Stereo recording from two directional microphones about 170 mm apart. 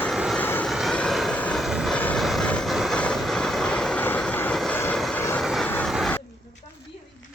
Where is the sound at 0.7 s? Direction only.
Centre (ahead or behind).